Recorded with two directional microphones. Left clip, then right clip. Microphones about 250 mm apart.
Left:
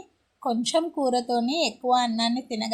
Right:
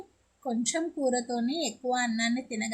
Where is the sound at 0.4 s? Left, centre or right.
Centre.